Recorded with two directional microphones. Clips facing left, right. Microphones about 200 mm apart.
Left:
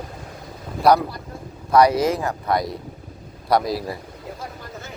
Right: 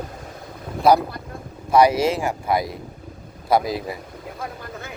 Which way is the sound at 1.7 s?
25° right (ahead or behind).